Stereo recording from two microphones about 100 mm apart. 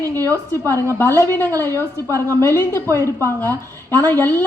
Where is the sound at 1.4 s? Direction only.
35° right (ahead or behind).